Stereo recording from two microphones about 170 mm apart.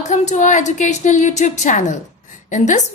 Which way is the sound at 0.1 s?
45° left (ahead or behind).